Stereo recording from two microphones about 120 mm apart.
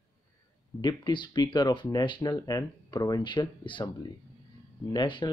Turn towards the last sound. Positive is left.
turn(degrees=40)  # may be behind; listen again after turning